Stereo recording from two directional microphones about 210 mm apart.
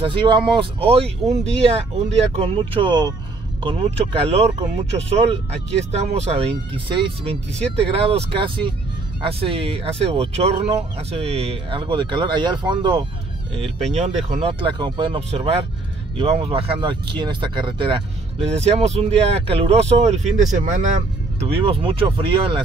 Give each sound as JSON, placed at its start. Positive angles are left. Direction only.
{"t": 0.0, "sound": "speech", "side_deg": -25}
{"t": 13.9, "sound": "speech", "side_deg": -35}